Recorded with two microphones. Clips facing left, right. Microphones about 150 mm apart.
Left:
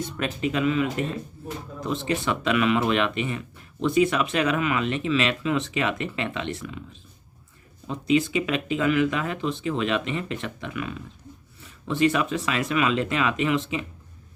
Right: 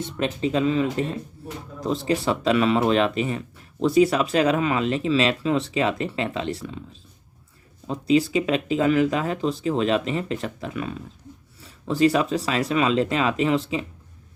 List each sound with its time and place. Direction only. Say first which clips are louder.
0.0 s speech: right 2 dB; 25° right (ahead or behind)